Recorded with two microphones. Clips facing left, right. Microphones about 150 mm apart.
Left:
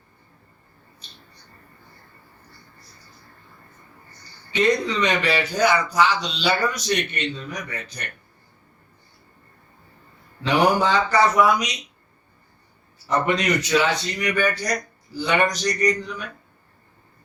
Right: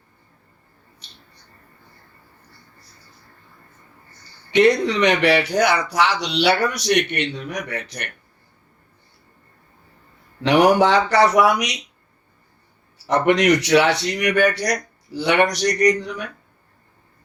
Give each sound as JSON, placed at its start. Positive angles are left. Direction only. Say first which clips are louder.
{"t": 4.5, "sound": "speech", "louder": "right 5 dB", "side_deg": -70}
{"t": 10.4, "sound": "speech", "louder": "right 5 dB", "side_deg": -70}
{"t": 13.1, "sound": "speech", "louder": "right 6 dB", "side_deg": -70}